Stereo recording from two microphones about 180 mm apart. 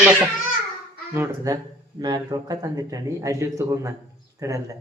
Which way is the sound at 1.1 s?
15° right (ahead or behind).